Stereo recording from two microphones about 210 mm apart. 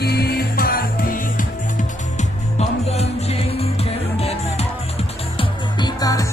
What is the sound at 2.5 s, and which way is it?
Music, 30° left (ahead or behind).